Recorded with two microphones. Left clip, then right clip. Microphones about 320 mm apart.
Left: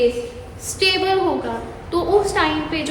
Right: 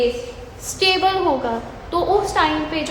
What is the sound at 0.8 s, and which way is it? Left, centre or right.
A woman's voice, centre.